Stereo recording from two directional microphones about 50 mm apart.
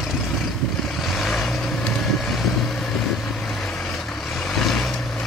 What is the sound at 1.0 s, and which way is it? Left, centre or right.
Vehicle, centre.